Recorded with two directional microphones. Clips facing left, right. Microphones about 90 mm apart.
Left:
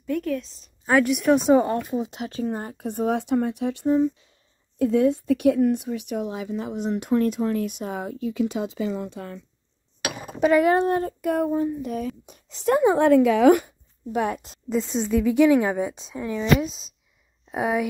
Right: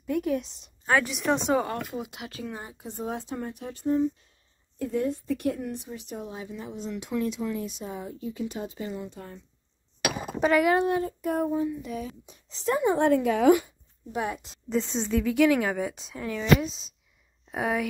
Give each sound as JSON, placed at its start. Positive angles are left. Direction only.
{"t": 0.0, "sound": "a woman's voice", "side_deg": -10}
{"t": 0.8, "sound": "a woman's voice", "side_deg": 5}
{"t": 1.5, "sound": "speech", "side_deg": 25}
{"t": 2.5, "sound": "speech", "side_deg": 55}
{"t": 7.5, "sound": "speech", "side_deg": 65}
{"t": 10.6, "sound": "speech", "side_deg": 35}
{"t": 11.1, "sound": "a sound", "side_deg": 70}
{"t": 11.5, "sound": "a woman's voice", "side_deg": 50}
{"t": 15.0, "sound": "speech", "side_deg": 15}
{"t": 17.5, "sound": "speech", "side_deg": 20}